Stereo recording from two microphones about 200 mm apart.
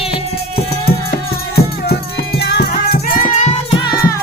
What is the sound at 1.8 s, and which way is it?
Music, 55° left (ahead or behind).